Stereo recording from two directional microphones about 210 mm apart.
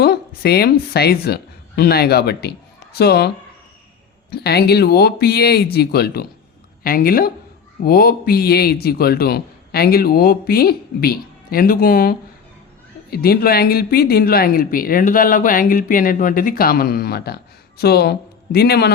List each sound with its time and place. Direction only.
0.0 s a woman's voice: 50° left (ahead or behind)